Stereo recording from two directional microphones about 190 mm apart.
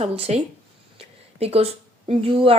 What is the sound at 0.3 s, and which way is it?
A woman's voice, 35° right (ahead or behind).